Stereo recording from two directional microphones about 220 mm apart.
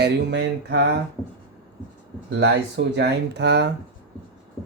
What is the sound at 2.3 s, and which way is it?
Speech, 50° right (ahead or behind).